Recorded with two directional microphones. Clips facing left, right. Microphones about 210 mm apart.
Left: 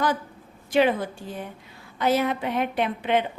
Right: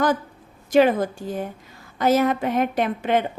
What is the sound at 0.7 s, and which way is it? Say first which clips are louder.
A woman's voice: right 4 dB; 45° right (ahead or behind).